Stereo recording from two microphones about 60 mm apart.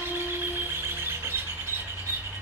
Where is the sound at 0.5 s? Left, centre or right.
Right.